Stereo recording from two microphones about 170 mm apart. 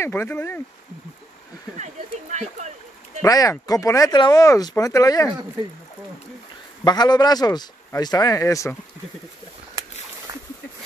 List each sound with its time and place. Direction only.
0.0 s speech: 15° left (ahead or behind)
2.3 s speech: 45° right (ahead or behind)
3.2 s speech: 20° left (ahead or behind)
6.8 s speech: 25° left (ahead or behind)